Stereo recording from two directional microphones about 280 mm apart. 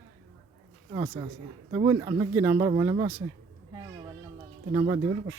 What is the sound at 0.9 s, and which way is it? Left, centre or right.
Speech, centre.